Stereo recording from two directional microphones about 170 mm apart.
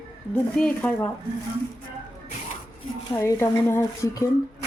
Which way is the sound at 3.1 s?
15° left (ahead or behind).